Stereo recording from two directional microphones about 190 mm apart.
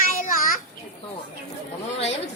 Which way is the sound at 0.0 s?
45° left (ahead or behind).